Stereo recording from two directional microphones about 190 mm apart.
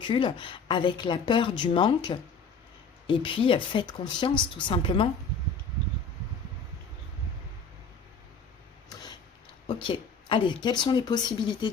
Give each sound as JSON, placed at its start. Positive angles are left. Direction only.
{"t": 0.0, "sound": "speech", "side_deg": 25}
{"t": 9.6, "sound": "speech", "side_deg": 30}